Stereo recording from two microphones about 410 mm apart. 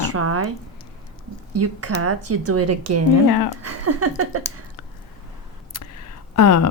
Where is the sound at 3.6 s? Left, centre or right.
Right.